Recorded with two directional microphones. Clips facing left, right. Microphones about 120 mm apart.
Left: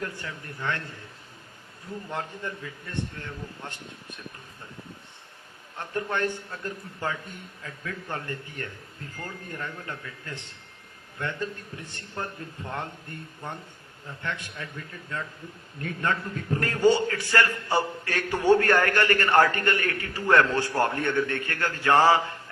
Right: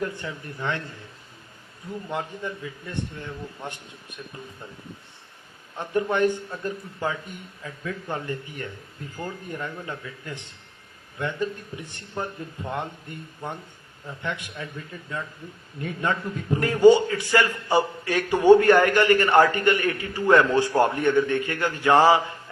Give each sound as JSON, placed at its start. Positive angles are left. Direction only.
{"t": 0.0, "sound": "a man's voice", "side_deg": -20}
{"t": 2.0, "sound": "a man's voice", "side_deg": -15}
{"t": 5.7, "sound": "a man's voice", "side_deg": -15}
{"t": 15.8, "sound": "a man's voice", "side_deg": -15}